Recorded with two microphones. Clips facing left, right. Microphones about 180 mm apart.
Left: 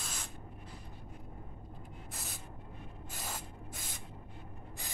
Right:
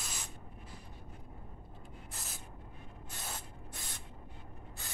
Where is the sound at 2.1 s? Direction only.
Centre (ahead or behind).